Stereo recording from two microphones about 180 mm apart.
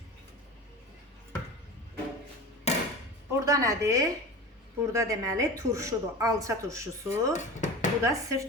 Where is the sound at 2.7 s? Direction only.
35° left (ahead or behind).